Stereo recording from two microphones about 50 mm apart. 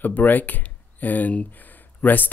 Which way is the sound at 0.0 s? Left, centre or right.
Left.